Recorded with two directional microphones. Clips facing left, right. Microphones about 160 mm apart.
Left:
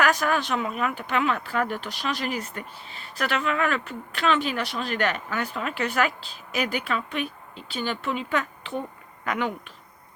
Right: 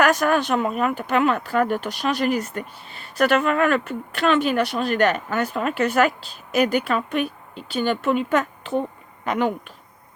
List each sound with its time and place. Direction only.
0.0 s speech: 50° right (ahead or behind)